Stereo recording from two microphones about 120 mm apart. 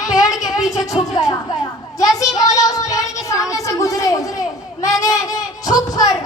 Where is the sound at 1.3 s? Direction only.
30° left (ahead or behind).